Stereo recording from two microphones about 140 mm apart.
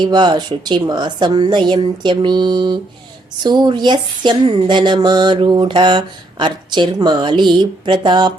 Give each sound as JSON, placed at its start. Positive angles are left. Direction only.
{"t": 0.0, "sound": "speech", "side_deg": -30}